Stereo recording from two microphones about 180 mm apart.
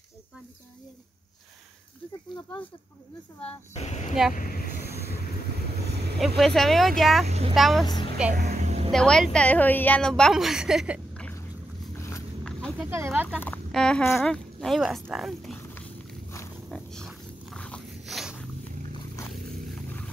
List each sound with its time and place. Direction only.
3.7 s speech: 40° left (ahead or behind)
4.4 s speech: 50° left (ahead or behind)
6.1 s a woman's voice: centre (ahead or behind)
7.2 s speech: 35° right (ahead or behind)
7.5 s a woman's voice: centre (ahead or behind)
7.8 s a woman's voice: 25° left (ahead or behind)
8.5 s a sound: 35° right (ahead or behind)
8.9 s a woman's voice: 5° left (ahead or behind)
12.4 s a sound: 5° left (ahead or behind)
12.9 s speech: 10° right (ahead or behind)
13.4 s a woman's voice: 5° left (ahead or behind)
15.7 s walk: 15° left (ahead or behind)
16.7 s dog: centre (ahead or behind)